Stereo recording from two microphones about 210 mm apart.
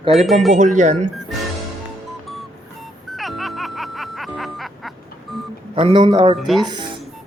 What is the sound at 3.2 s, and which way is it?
Music, centre (ahead or behind).